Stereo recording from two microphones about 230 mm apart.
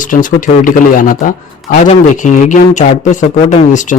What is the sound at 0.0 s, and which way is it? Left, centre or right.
Speech, left.